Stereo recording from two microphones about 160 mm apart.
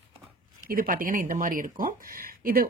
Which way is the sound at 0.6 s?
60° right (ahead or behind).